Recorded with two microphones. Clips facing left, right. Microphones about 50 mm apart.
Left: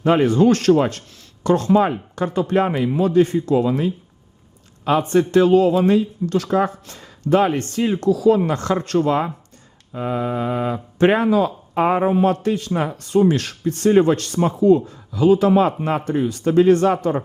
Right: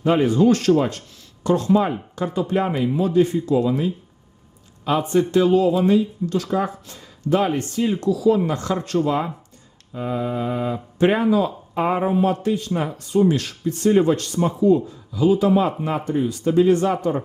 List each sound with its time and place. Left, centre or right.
0.0 s speech: left
2.9 s speech: left
4.9 s speech: left
9.9 s speech: left